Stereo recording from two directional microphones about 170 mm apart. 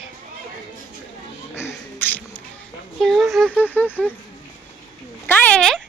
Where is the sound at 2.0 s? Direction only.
10° left (ahead or behind).